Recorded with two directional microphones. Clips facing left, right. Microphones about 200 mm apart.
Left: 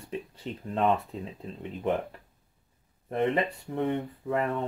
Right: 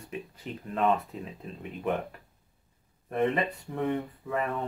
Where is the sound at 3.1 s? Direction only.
30° left (ahead or behind).